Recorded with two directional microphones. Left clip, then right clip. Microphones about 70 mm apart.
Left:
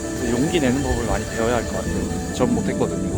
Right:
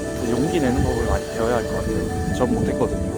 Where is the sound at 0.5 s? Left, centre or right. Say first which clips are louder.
Even; left.